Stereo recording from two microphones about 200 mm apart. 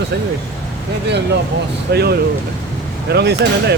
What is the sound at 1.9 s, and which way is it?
Speech, 55° right (ahead or behind).